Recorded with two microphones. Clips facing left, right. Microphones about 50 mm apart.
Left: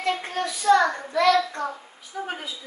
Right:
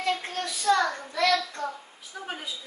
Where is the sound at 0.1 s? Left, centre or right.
Left.